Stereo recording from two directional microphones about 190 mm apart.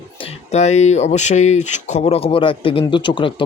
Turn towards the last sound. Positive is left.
turn(degrees=25)  # may be behind; listen again after turning